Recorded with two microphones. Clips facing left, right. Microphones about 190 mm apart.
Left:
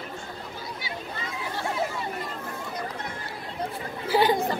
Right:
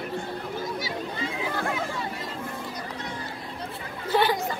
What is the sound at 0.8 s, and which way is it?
Chatter, 40° right (ahead or behind).